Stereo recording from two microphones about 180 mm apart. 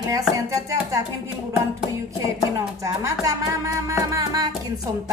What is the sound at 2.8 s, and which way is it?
Music, 20° right (ahead or behind).